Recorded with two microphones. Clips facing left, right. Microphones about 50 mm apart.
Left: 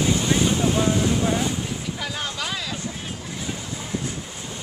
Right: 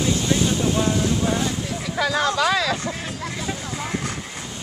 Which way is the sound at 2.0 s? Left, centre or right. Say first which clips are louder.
Right 9 dB; right.